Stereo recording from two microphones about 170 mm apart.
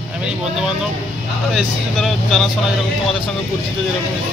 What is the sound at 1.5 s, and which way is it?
Speech, centre (ahead or behind).